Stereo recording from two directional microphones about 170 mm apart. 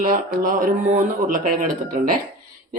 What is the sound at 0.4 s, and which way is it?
A woman's voice, 55° right (ahead or behind).